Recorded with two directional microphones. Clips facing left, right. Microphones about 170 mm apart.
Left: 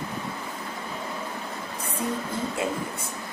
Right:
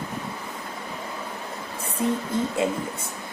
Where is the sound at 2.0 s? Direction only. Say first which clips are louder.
Right 5 dB; 20° right (ahead or behind).